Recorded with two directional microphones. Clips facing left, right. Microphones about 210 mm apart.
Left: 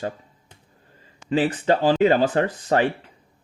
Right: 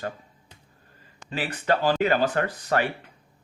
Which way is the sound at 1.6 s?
25° left (ahead or behind).